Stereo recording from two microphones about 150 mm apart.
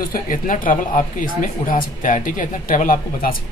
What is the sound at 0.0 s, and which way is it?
Speech, 70° left (ahead or behind).